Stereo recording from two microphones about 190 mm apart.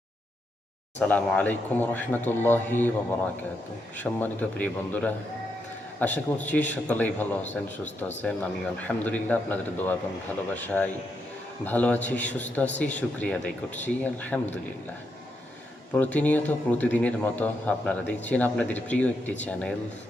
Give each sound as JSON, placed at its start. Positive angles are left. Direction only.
{"t": 0.9, "sound": "speech", "side_deg": 10}
{"t": 3.9, "sound": "speech", "side_deg": 10}
{"t": 15.9, "sound": "speech", "side_deg": 10}